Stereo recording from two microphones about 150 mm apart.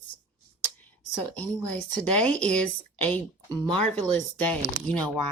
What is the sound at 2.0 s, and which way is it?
Speech, 10° left (ahead or behind).